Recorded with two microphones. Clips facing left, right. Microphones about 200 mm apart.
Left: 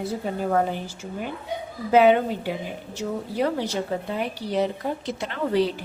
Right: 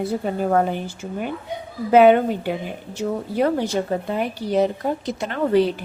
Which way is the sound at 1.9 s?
55° right (ahead or behind).